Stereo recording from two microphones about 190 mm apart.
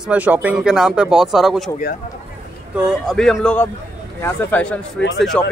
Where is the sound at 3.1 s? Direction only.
5° left (ahead or behind).